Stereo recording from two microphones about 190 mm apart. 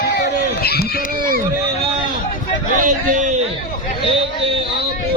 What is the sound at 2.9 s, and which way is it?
Speech, 40° right (ahead or behind).